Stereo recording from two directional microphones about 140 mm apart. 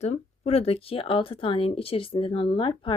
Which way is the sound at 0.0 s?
50° left (ahead or behind).